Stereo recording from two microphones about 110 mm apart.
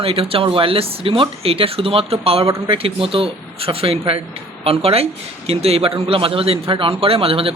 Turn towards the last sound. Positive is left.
turn(degrees=-60)  # may be behind; listen again after turning